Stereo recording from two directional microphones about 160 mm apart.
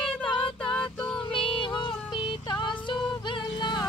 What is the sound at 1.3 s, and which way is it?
Music, 30° left (ahead or behind).